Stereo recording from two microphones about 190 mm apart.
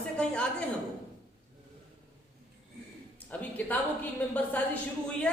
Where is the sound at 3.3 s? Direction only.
10° left (ahead or behind).